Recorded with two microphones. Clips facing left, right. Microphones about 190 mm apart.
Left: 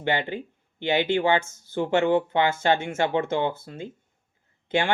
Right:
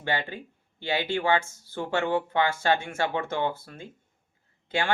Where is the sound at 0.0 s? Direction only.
20° left (ahead or behind).